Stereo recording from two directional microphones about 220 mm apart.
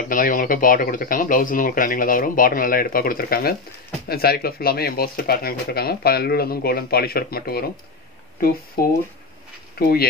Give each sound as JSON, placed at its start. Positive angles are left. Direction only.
{"t": 0.1, "sound": "speech", "side_deg": 40}
{"t": 8.8, "sound": "speech", "side_deg": 45}